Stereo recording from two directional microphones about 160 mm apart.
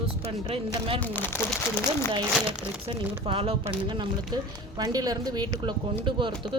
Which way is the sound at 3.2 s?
35° right (ahead or behind).